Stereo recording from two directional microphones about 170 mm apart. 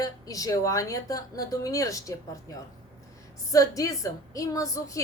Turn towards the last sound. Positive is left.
turn(degrees=20)  # may be behind; listen again after turning